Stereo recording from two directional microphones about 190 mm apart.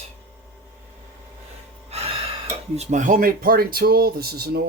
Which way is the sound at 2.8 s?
40° right (ahead or behind).